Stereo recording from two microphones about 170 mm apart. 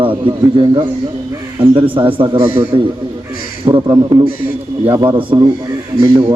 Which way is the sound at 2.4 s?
15° right (ahead or behind).